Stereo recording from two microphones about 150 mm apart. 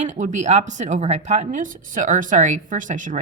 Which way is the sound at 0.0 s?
55° right (ahead or behind).